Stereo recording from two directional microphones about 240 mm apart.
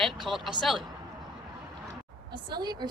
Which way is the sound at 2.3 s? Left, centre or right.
Centre.